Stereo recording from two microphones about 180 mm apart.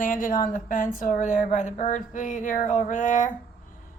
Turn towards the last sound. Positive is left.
turn(degrees=45)  # may be behind; listen again after turning